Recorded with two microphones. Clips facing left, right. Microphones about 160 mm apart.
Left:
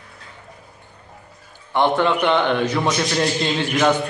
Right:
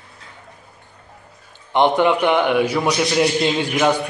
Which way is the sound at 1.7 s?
15° right (ahead or behind).